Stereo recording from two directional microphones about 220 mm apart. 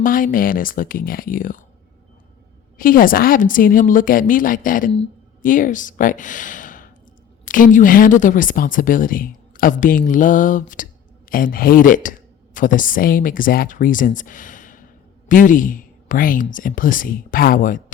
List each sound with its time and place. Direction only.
0.0 s a woman's voice: 40° left (ahead or behind)
2.7 s a woman's voice: 40° left (ahead or behind)